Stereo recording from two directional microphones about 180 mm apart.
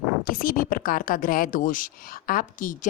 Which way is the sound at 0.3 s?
50° left (ahead or behind).